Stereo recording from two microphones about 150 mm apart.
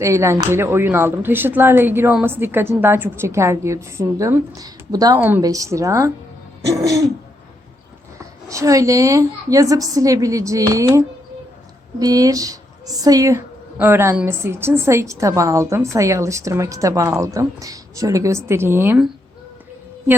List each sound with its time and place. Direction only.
0.0 s a woman's voice: 20° right (ahead or behind)
8.4 s a woman's voice: 20° right (ahead or behind)